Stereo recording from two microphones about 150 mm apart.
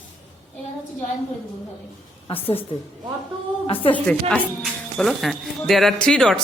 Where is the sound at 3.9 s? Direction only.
5° left (ahead or behind).